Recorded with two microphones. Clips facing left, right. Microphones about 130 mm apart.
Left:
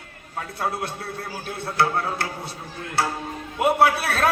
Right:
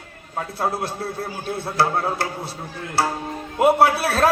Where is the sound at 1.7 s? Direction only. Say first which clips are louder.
Right 1 dB; 30° right (ahead or behind).